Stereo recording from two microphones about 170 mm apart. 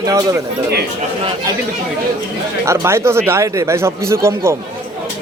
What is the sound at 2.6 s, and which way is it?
Speech, 15° right (ahead or behind).